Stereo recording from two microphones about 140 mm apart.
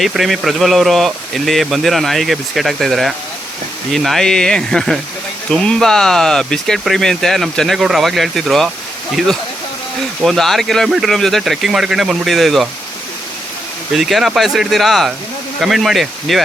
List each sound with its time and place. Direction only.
0.0 s speech: centre (ahead or behind)
13.9 s speech: centre (ahead or behind)